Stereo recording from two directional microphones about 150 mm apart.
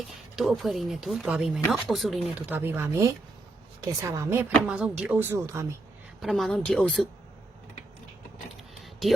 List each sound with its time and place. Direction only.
0.3 s speech: centre (ahead or behind)
2.5 s speech: 15° right (ahead or behind)
6.2 s speech: centre (ahead or behind)
8.8 s a sound: centre (ahead or behind)